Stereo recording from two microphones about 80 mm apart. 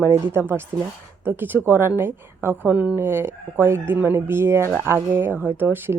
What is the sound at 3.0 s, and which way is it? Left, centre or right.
Speech, right.